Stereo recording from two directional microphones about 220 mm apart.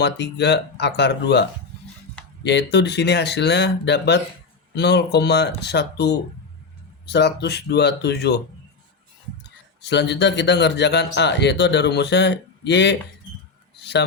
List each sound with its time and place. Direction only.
0.0 s speech: 50° left (ahead or behind)
9.8 s speech: 50° left (ahead or behind)